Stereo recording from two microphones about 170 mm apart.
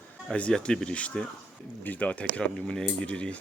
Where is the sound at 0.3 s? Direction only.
5° left (ahead or behind).